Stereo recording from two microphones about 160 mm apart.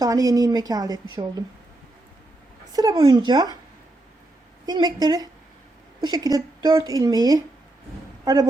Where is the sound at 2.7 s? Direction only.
25° right (ahead or behind).